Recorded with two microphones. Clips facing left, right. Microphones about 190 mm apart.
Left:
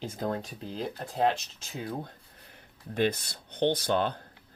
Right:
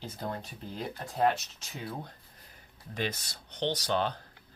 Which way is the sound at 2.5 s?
55° left (ahead or behind).